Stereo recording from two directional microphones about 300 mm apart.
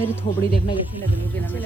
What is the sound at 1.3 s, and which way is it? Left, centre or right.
Speech, centre.